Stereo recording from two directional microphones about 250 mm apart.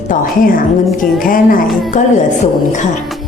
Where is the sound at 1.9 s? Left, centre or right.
Left.